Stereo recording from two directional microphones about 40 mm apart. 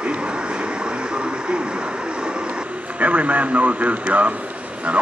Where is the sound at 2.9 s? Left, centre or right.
Right.